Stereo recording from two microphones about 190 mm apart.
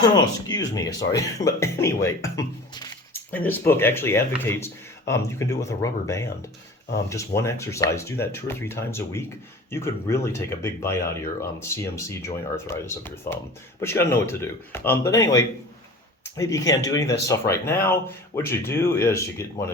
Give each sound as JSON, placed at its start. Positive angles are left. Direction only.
{"t": 0.0, "sound": "speech", "side_deg": 20}